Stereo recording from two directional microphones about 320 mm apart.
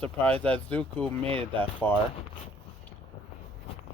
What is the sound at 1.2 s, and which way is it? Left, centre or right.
Speech, centre.